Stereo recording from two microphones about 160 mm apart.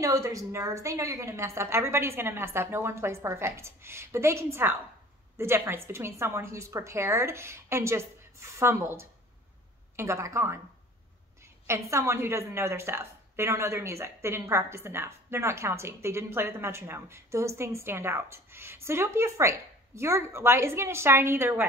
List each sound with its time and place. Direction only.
0.0 s a woman's voice: 20° right (ahead or behind)
11.6 s a woman's voice: 15° right (ahead or behind)